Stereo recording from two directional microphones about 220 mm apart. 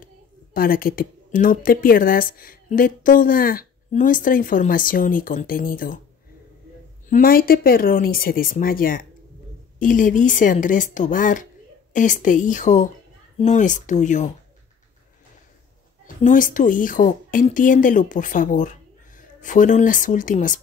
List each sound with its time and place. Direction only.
0.0 s a woman's voice: 40° left (ahead or behind)
7.1 s speech: 40° left (ahead or behind)
16.2 s speech: 35° left (ahead or behind)